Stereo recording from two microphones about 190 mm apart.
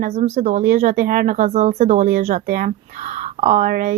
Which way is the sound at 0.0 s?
40° right (ahead or behind).